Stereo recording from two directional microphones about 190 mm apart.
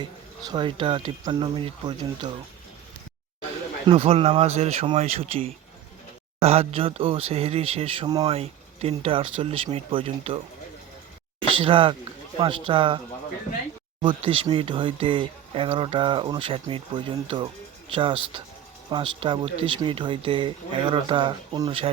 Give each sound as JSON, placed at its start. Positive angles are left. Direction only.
{"t": 0.0, "sound": "speech", "side_deg": -20}
{"t": 3.8, "sound": "speech", "side_deg": -30}
{"t": 11.4, "sound": "speech", "side_deg": -25}
{"t": 14.0, "sound": "speech", "side_deg": -25}